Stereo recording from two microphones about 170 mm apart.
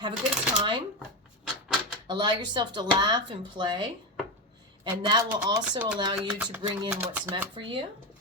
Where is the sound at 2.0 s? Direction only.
25° right (ahead or behind).